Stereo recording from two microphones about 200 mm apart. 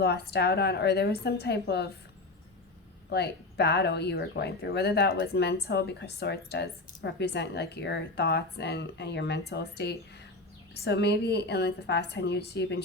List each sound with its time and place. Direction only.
0.0 s a woman's voice: 55° left (ahead or behind)
3.1 s a woman's voice: 55° left (ahead or behind)